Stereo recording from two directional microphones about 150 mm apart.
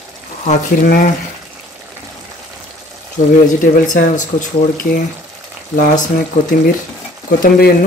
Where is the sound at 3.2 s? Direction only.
55° left (ahead or behind).